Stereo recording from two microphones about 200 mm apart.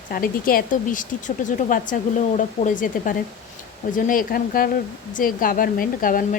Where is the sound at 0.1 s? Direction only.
45° left (ahead or behind).